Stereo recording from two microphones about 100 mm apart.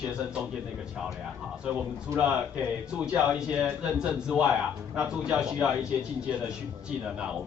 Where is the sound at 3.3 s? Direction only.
10° right (ahead or behind).